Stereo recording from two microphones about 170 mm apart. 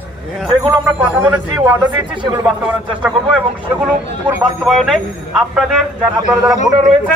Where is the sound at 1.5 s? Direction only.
25° right (ahead or behind).